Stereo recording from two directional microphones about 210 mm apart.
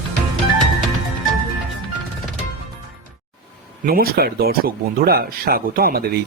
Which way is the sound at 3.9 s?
45° right (ahead or behind).